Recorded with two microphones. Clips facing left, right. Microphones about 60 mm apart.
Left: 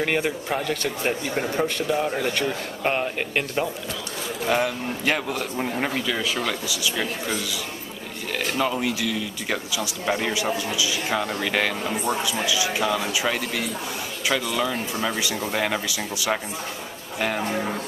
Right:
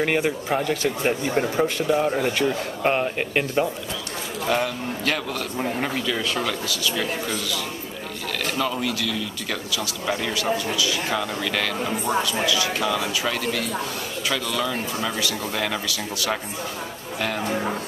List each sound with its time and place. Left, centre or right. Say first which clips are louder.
0.0 s speech: right 2 dB; centre
4.5 s speech: left 1 dB; centre
5.6 s speech: right 2 dB; centre
17.5 s speech: right 1 dB; centre